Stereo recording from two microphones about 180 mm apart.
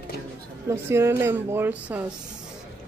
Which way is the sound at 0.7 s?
15° right (ahead or behind).